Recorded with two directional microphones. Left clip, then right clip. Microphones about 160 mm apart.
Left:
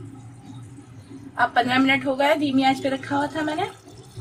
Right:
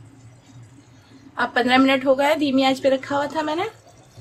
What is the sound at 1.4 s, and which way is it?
A woman's voice, 65° right (ahead or behind).